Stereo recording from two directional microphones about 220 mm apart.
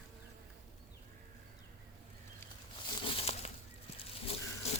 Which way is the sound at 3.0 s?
25° left (ahead or behind).